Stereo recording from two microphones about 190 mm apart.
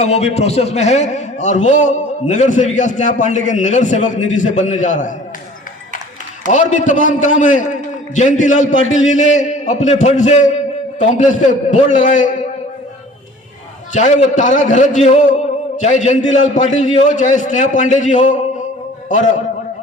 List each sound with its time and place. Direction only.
0.0 s a man's voice: 35° left (ahead or behind)
6.5 s a man's voice: 40° left (ahead or behind)
13.9 s a man's voice: 40° left (ahead or behind)